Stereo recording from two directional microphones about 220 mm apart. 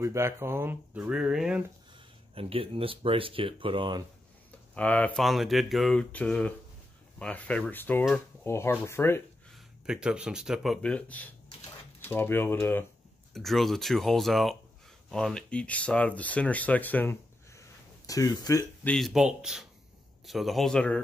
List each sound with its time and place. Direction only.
0.0 s speech: 10° right (ahead or behind)
2.3 s speech: 25° right (ahead or behind)
4.7 s speech: 5° left (ahead or behind)
9.5 s speech: 5° right (ahead or behind); by 18.7 s 15° left (ahead or behind)
18.9 s speech: centre (ahead or behind)